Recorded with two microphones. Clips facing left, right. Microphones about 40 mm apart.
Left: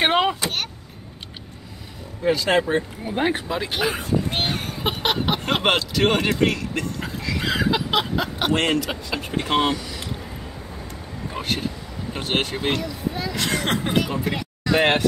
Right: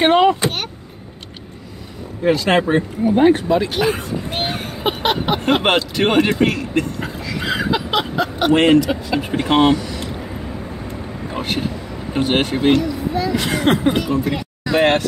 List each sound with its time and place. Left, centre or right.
0.0 s speech: centre
2.2 s speech: right
3.1 s speech: centre
9.3 s speech: centre
11.2 s speech: centre